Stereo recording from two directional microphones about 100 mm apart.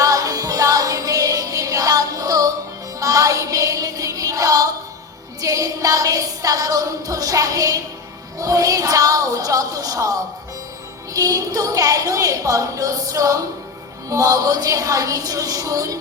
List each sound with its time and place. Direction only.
0.0 s music: 35° right (ahead or behind)
5.4 s a sound: 35° right (ahead or behind)
8.4 s a woman's voice: 35° right (ahead or behind)